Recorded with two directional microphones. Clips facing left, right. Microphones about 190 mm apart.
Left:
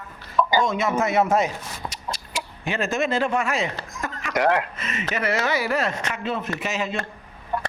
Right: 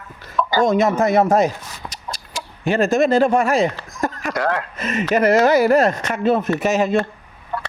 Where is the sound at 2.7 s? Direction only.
40° right (ahead or behind).